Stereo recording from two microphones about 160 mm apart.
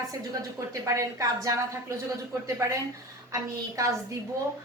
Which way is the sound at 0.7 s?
20° right (ahead or behind).